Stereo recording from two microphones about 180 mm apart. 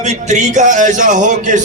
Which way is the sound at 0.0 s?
40° right (ahead or behind).